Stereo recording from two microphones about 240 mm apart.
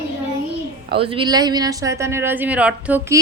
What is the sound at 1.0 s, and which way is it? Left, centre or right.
A woman's voice, right.